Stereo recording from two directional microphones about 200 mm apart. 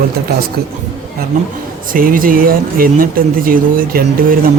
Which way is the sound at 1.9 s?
45° right (ahead or behind).